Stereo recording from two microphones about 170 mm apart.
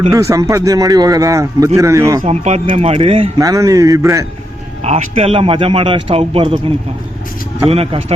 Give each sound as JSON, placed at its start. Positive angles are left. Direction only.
{"t": 0.1, "sound": "speech", "side_deg": -20}
{"t": 2.2, "sound": "a man's voice", "side_deg": -40}
{"t": 3.3, "sound": "speech", "side_deg": -20}
{"t": 4.8, "sound": "a man's voice", "side_deg": -40}